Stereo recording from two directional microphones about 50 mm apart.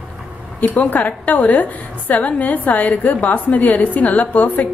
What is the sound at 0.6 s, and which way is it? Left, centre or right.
A woman's voice, left.